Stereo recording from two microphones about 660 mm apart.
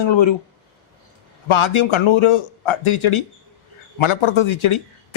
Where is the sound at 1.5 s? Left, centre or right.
Left.